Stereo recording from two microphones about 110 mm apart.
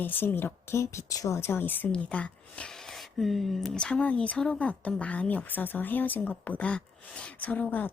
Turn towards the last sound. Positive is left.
turn(degrees=15)  # may be behind; listen again after turning